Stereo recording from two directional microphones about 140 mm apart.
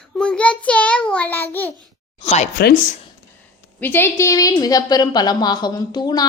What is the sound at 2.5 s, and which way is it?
Speech, 80° left.